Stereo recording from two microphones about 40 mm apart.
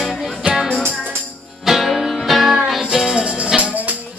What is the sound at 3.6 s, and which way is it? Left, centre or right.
Music, right.